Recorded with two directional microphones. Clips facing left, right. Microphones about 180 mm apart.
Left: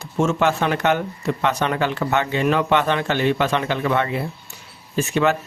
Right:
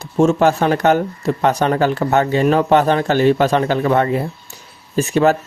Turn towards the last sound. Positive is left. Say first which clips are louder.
# right 5 dB
turn(degrees=-40)  # may be behind; listen again after turning